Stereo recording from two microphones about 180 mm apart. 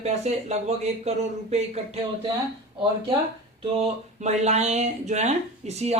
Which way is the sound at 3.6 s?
35° right (ahead or behind).